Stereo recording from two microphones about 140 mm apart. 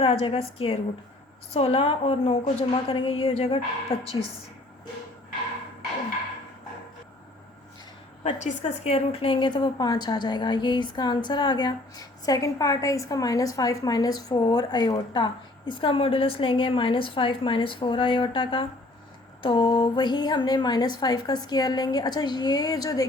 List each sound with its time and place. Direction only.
0.0 s a woman's voice: 45° left (ahead or behind)
8.2 s a woman's voice: 55° left (ahead or behind); by 23.0 s 25° left (ahead or behind)